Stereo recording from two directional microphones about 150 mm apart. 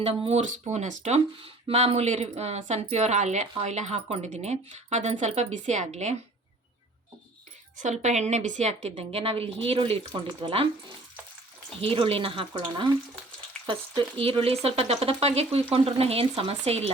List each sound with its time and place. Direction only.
0.3 s speech: 50° right (ahead or behind)
7.8 s speech: 50° right (ahead or behind); by 10.7 s 35° right (ahead or behind)
11.8 s speech: 40° right (ahead or behind)